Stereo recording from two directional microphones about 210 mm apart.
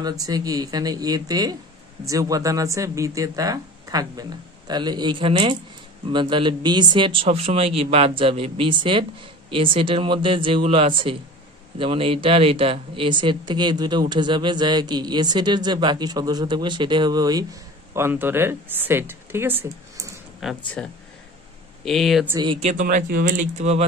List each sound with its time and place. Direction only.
0.0 s speech: 15° right (ahead or behind); by 22.3 s centre (ahead or behind)
22.3 s speech: 20° right (ahead or behind)